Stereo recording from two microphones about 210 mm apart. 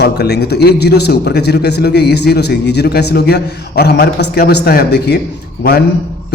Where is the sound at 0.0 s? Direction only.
50° left (ahead or behind).